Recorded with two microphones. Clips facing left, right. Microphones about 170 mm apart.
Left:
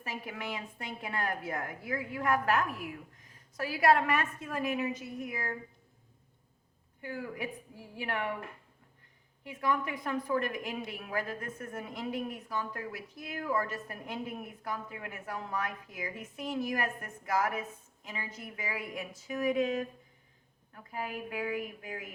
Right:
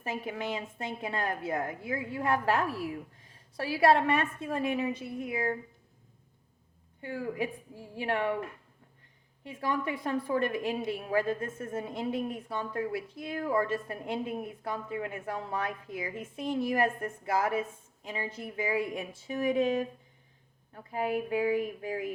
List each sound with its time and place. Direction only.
0.0 s a woman's voice: 25° right (ahead or behind)
7.0 s a woman's voice: 25° right (ahead or behind)
9.4 s a woman's voice: 30° right (ahead or behind)